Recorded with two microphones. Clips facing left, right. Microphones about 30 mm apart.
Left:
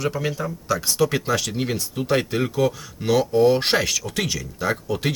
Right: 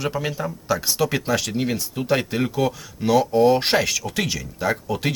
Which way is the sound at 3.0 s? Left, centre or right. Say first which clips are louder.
Right 1 dB; centre.